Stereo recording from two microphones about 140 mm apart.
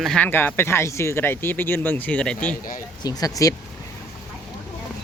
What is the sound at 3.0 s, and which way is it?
Speech, 30° left (ahead or behind).